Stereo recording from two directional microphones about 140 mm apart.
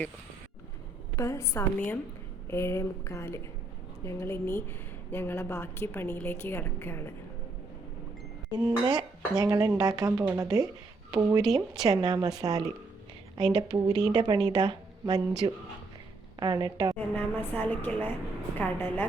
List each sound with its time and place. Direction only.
1.1 s a woman's voice: 20° left (ahead or behind)
8.9 s speech: 30° right (ahead or behind)
17.2 s a woman's voice: 10° left (ahead or behind)